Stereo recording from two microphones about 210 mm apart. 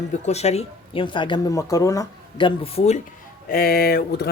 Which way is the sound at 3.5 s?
45° left (ahead or behind).